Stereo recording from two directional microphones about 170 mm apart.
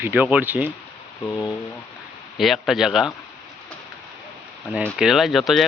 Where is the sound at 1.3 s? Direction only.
25° left (ahead or behind).